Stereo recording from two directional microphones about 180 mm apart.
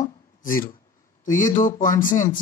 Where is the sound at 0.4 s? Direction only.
50° left (ahead or behind).